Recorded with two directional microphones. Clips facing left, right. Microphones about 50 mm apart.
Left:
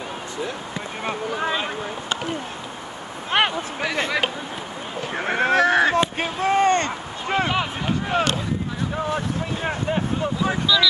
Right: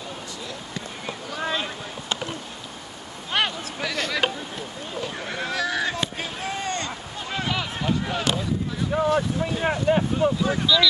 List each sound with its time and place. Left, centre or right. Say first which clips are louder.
1.3 s speech: even; centre
3.3 s speech: left 4 dB; left
5.1 s fowl: left 13 dB; left
6.4 s a sound: left 12 dB; left
7.2 s a sound: left 6 dB; left
8.9 s speech: right 5 dB; centre